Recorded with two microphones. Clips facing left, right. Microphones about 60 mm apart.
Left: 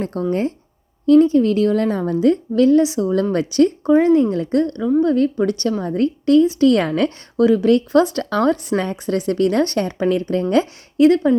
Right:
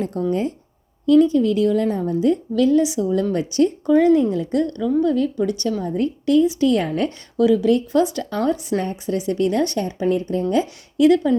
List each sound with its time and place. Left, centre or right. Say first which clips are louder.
0.0 s a woman's voice: left 1 dB; left
2.6 s a woman's voice: left 3 dB; left
3.0 s a woman's voice: left 2 dB; left
3.3 s speech: left 4 dB; left
4.2 s a woman's voice: left 2 dB; left
5.0 s a woman's voice: left 3 dB; left
7.3 s a woman's voice: left 2 dB; left
8.3 s a woman's voice: left 3 dB; left
10.9 s speech: left 2 dB; left